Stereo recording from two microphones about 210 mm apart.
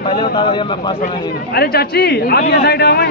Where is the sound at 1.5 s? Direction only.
50° left (ahead or behind).